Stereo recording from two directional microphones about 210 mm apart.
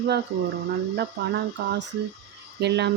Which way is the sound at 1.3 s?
50° right (ahead or behind).